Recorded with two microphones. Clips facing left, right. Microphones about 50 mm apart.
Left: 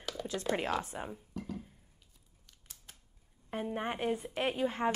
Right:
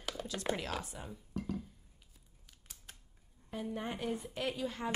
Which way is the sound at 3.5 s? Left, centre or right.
Left.